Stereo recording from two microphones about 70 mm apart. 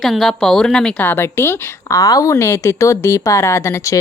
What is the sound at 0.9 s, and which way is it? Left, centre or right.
Speech, left.